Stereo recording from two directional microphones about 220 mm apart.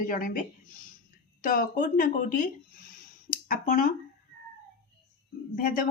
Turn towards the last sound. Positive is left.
turn(degrees=40)  # may be behind; listen again after turning